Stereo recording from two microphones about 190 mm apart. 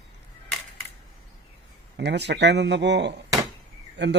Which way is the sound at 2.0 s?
65° right (ahead or behind).